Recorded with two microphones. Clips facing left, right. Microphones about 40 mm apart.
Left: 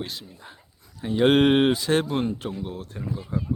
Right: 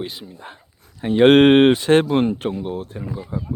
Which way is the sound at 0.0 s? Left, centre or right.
Centre.